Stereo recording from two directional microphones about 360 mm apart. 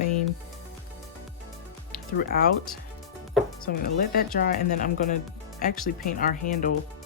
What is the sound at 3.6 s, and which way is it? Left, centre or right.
Speech, left.